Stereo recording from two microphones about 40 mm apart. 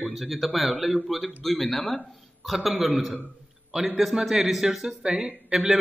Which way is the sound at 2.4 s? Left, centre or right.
Centre.